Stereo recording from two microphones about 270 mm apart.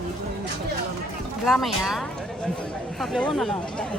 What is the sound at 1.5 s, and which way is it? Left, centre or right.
Speech, centre.